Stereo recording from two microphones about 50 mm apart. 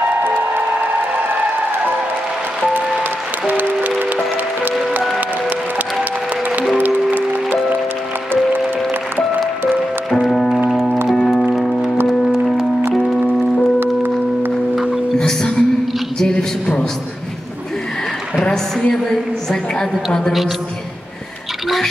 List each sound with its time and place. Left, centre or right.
0.0 s music: right
3.4 s music: right
6.8 s music: right
10.2 s music: centre
13.0 s music: centre
13.7 s music: right
15.1 s music: centre
16.2 s a sound: centre
18.4 s a sound: centre